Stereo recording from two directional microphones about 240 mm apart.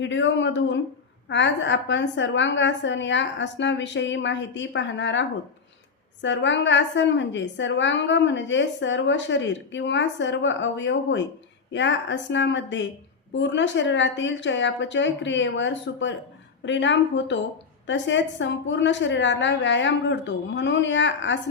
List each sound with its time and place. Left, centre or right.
0.0 s a woman's voice: left
6.2 s a woman's voice: left